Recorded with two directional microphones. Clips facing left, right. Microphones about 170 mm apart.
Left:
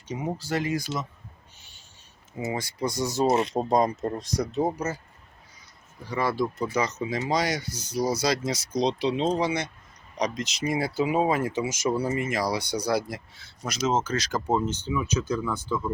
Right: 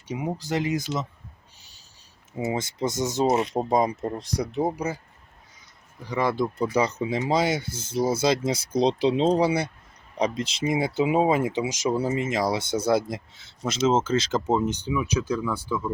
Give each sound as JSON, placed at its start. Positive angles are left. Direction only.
{"t": 0.1, "sound": "speech", "side_deg": -10}
{"t": 2.4, "sound": "speech", "side_deg": -20}
{"t": 3.5, "sound": "speech", "side_deg": -10}
{"t": 6.1, "sound": "speech", "side_deg": -20}